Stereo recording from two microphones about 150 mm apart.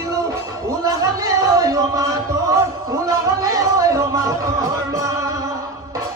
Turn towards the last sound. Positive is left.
turn(degrees=-20)  # may be behind; listen again after turning